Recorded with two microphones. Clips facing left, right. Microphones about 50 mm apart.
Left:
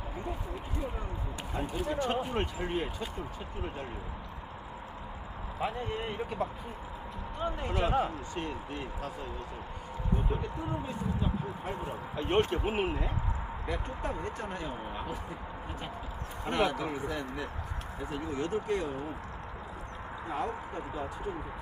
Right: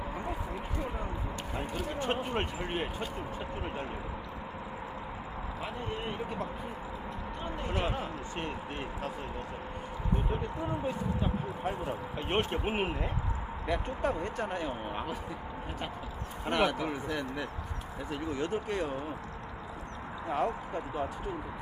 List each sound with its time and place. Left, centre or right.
1.9 s speech: right
7.7 s speech: right
10.8 s speech: right
16.5 s speech: right
20.2 s speech: right